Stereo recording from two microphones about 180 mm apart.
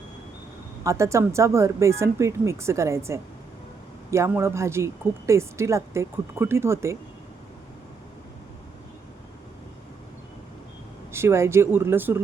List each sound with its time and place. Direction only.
0.9 s speech: 15° right (ahead or behind)
11.1 s speech: 15° right (ahead or behind)